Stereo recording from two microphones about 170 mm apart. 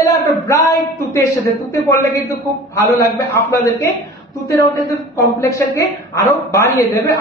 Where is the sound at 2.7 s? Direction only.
15° left (ahead or behind).